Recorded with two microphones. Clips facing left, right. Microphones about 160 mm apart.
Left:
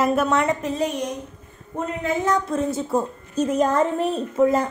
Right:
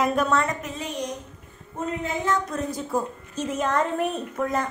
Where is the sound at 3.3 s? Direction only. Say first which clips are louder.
Left 8 dB; 40° left (ahead or behind).